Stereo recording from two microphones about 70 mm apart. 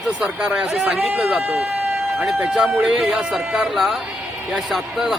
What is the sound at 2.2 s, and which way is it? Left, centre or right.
Speech, centre.